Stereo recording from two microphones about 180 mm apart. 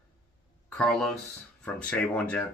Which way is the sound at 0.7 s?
5° left (ahead or behind).